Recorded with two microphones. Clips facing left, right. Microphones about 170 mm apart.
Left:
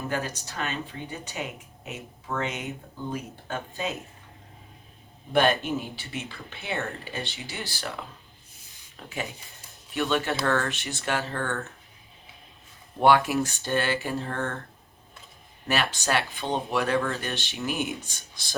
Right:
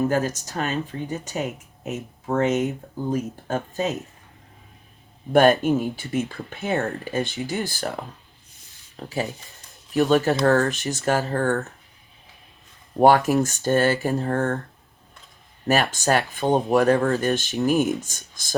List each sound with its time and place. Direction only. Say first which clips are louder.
0.1 s speech: right 8 dB; 45° right (ahead or behind)
5.3 s speech: right 7 dB; 45° right (ahead or behind)
9.0 s speech: right 7 dB; 35° right (ahead or behind)
13.0 s speech: right 4 dB; 40° right (ahead or behind)
15.6 s speech: right 6 dB; 45° right (ahead or behind)